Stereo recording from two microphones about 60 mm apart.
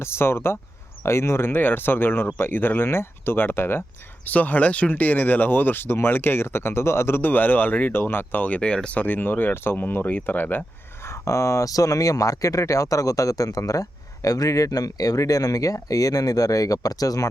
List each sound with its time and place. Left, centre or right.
0.0 s speech: left
4.3 s speech: left
9.0 s speech: left
11.0 s speech: left